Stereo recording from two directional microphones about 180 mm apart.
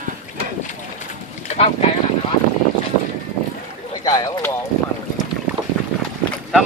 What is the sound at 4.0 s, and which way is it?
Speech, 20° left (ahead or behind).